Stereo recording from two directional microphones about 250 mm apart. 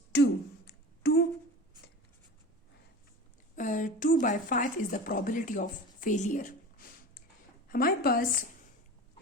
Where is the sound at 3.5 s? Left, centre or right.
Left.